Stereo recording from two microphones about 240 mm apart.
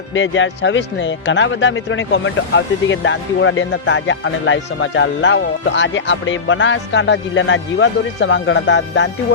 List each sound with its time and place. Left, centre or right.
0.1 s speech: left